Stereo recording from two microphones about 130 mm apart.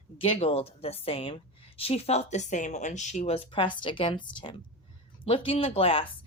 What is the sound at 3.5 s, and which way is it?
A woman's voice, 40° left (ahead or behind).